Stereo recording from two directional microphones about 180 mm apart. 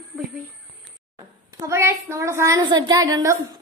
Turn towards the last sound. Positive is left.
turn(degrees=-20)  # may be behind; listen again after turning